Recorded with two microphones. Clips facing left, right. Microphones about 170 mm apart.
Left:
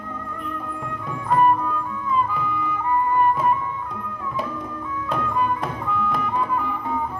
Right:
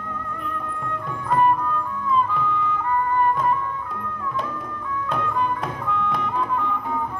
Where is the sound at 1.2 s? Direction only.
5° left (ahead or behind).